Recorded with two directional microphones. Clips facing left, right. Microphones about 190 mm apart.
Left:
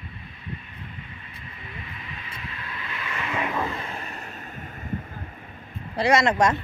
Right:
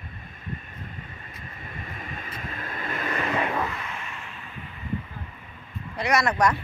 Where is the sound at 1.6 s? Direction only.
45° right (ahead or behind).